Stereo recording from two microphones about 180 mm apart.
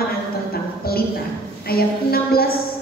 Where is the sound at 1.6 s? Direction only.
55° left (ahead or behind).